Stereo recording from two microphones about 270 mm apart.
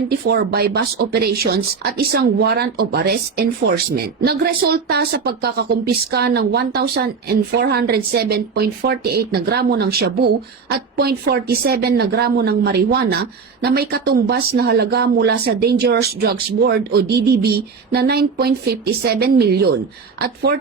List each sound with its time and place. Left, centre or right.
0.1 s speech: right